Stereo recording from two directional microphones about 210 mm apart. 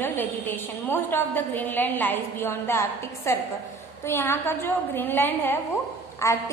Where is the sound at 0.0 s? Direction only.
10° left (ahead or behind).